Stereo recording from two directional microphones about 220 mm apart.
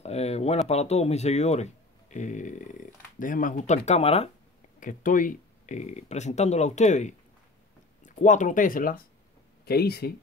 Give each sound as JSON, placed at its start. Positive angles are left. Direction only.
{"t": 0.0, "sound": "speech", "side_deg": 30}